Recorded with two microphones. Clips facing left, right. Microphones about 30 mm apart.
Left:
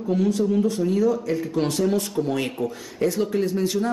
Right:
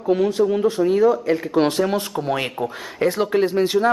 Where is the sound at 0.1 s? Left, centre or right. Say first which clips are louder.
Right 4 dB; right.